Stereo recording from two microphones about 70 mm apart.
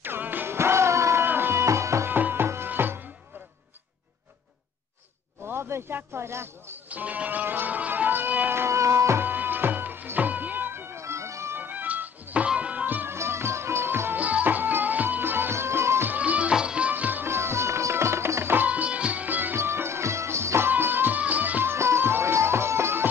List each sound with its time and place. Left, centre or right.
0.0 s music: right
2.0 s music: right
5.5 s a sound: right
6.9 s music: right
9.2 s music: right
11.5 s music: right
13.1 s music: right
16.1 s music: centre
16.9 s music: right
18.7 s music: centre
19.5 s music: right
21.7 s music: right